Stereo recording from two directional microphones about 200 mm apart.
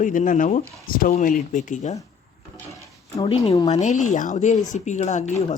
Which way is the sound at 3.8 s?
35° left (ahead or behind).